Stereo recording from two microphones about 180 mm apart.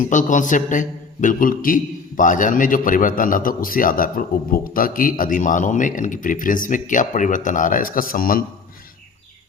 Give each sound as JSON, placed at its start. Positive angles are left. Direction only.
{"t": 0.0, "sound": "a man's voice", "side_deg": 45}